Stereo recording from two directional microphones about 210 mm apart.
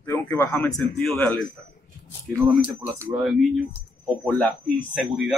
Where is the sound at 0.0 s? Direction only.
15° left (ahead or behind).